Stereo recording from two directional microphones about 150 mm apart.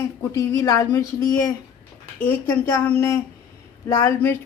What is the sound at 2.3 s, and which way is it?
Speech, 15° left (ahead or behind).